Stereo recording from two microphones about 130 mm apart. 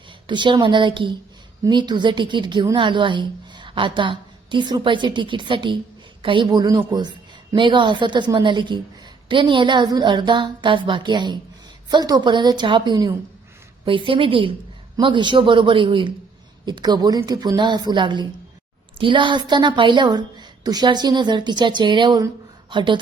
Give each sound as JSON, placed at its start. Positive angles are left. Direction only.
{"t": 0.3, "sound": "a woman's voice", "side_deg": -35}